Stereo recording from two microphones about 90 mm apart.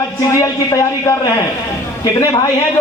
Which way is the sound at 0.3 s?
40° left (ahead or behind).